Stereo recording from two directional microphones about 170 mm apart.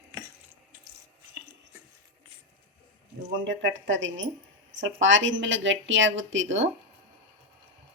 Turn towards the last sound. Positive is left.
turn(degrees=-90)